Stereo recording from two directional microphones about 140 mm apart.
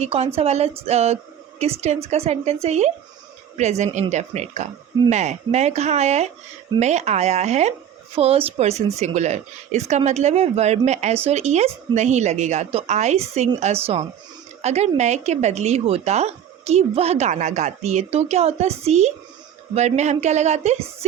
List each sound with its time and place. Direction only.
0.0 s speech: 50° right (ahead or behind)